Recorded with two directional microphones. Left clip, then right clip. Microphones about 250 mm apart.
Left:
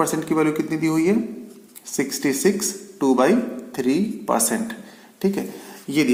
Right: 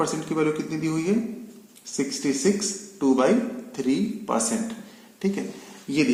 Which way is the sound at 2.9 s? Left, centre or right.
Left.